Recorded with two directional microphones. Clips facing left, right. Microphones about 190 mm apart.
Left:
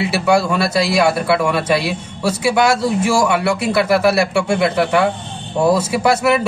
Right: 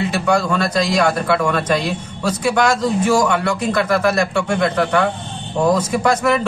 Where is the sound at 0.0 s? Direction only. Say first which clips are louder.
Left 2 dB; 10° left (ahead or behind).